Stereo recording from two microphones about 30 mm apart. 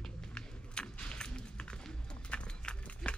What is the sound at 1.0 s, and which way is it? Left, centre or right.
Music, left.